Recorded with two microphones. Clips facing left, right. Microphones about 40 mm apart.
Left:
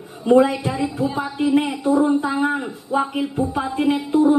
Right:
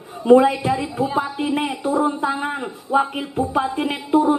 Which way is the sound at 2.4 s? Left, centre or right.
Right.